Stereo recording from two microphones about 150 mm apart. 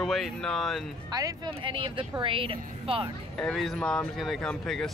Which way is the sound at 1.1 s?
30° right (ahead or behind).